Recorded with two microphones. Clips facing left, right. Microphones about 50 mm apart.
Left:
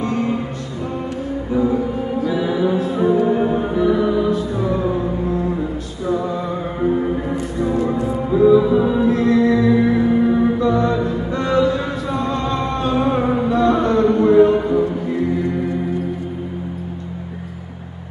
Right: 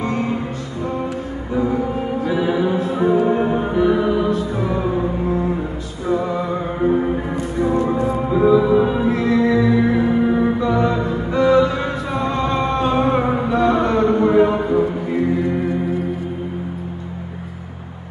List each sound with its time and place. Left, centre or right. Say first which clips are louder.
2.2 s music: even; centre
9.1 s music: left 2 dB; centre